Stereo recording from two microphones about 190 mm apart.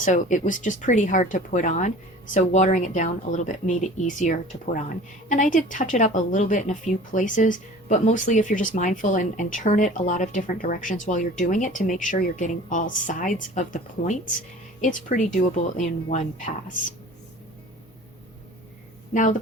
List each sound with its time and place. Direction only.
0.0 s speech: 40° left (ahead or behind)
19.1 s speech: 40° left (ahead or behind)